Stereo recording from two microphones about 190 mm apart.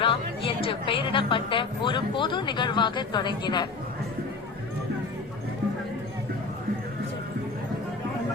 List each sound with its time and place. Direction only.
0.0 s a woman's voice: 30° left (ahead or behind)